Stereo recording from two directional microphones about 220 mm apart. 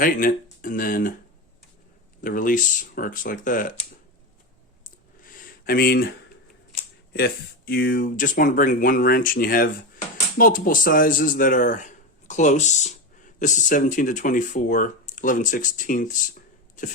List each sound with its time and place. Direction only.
0.0 s speech: 40° left (ahead or behind)
2.2 s speech: 40° left (ahead or behind)
4.8 s clicking: 40° left (ahead or behind)
7.1 s speech: 45° left (ahead or behind)